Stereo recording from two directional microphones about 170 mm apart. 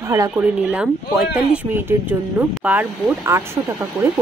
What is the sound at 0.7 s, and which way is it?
Speech, 5° right (ahead or behind).